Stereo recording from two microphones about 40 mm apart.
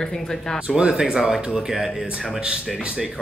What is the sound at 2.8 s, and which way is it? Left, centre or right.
Speech, right.